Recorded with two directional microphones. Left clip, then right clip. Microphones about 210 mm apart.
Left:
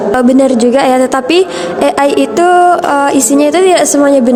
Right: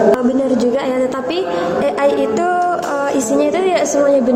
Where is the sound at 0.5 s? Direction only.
50° left (ahead or behind).